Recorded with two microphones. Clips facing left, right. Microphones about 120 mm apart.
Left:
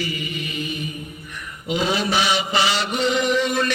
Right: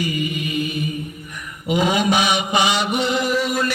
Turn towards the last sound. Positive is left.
turn(degrees=-10)  # may be behind; listen again after turning